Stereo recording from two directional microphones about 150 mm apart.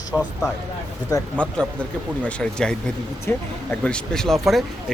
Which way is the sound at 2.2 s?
5° left (ahead or behind).